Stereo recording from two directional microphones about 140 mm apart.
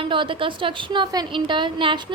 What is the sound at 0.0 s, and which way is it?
A woman's voice, 35° right (ahead or behind).